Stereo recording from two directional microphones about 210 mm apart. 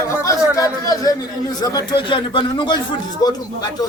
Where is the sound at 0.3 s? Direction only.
15° left (ahead or behind).